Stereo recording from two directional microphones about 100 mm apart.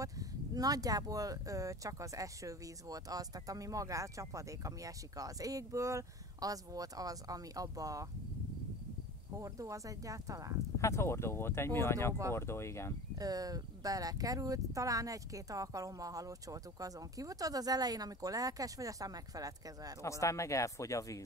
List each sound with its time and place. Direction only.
0.0 s speech: 35° right (ahead or behind)
9.4 s speech: 35° right (ahead or behind)
10.8 s speech: 25° left (ahead or behind)
13.2 s speech: 40° right (ahead or behind)
20.0 s speech: 30° left (ahead or behind)